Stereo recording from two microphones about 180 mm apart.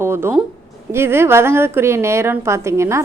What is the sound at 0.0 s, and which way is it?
A woman's voice, 15° right (ahead or behind).